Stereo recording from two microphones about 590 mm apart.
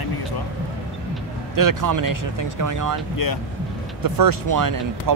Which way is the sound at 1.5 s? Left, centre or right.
Right.